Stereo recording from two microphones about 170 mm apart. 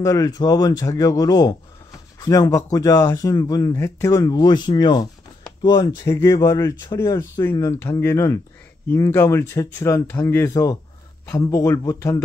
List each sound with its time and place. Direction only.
0.0 s speech: 20° left (ahead or behind)